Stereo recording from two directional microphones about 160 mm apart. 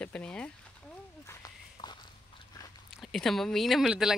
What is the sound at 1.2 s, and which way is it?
Walk, 25° left (ahead or behind).